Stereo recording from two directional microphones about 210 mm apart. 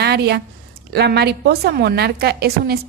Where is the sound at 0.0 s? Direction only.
50° right (ahead or behind).